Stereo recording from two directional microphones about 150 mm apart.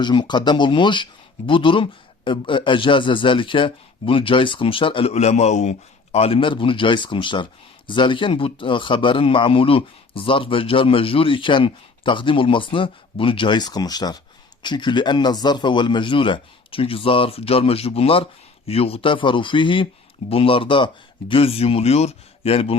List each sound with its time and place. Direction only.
0.0 s speech: 30° left (ahead or behind)